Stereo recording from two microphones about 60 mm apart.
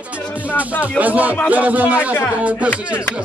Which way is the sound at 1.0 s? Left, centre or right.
Right.